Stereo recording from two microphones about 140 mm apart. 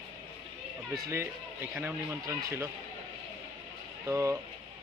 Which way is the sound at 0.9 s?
20° right (ahead or behind).